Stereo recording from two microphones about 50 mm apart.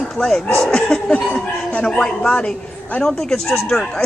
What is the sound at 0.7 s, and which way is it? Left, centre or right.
A man's voice, centre.